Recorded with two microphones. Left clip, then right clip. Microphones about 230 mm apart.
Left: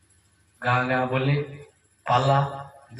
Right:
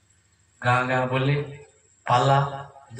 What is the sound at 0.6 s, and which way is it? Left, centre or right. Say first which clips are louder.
A man's voice: right 1 dB; right.